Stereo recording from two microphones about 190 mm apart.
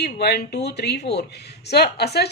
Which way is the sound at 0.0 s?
60° left (ahead or behind).